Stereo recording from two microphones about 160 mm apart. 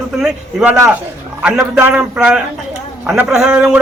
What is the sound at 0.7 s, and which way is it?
Speech, 20° right (ahead or behind).